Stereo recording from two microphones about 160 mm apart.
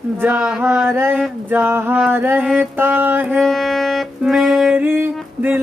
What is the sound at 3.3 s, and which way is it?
Music, centre (ahead or behind).